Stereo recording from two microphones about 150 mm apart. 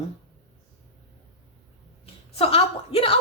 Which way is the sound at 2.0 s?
40° left (ahead or behind).